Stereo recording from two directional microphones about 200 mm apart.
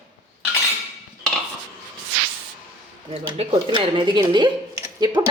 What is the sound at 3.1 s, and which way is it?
Speech, 30° right (ahead or behind).